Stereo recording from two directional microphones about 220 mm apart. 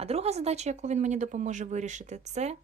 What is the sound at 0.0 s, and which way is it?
Speech, 30° right (ahead or behind).